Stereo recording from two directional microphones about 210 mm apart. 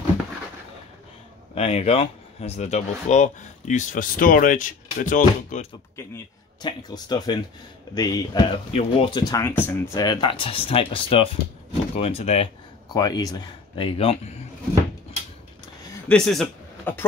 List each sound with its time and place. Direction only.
1.5 s speech: 30° left (ahead or behind)
6.6 s speech: 20° left (ahead or behind)
16.1 s a man's voice: centre (ahead or behind)